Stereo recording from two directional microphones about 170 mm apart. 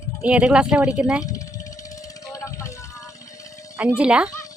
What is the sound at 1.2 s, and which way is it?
Vehicle, 20° left (ahead or behind).